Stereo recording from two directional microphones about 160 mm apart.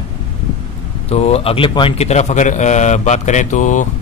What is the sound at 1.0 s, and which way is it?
A man's voice, 40° left (ahead or behind).